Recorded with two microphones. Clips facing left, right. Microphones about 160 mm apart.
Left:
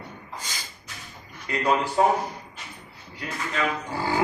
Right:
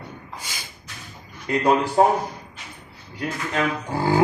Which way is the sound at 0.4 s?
10° right (ahead or behind).